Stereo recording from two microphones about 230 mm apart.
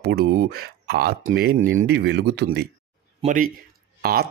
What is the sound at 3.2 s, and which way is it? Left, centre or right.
Speech, right.